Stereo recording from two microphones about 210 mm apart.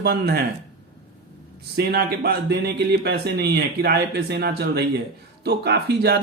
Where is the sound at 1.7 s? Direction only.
50° right (ahead or behind).